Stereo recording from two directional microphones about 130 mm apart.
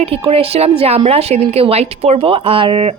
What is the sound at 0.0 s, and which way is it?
A woman's voice, 45° right (ahead or behind).